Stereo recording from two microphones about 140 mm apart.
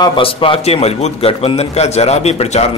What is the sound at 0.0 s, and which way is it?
A man's voice, 40° left (ahead or behind).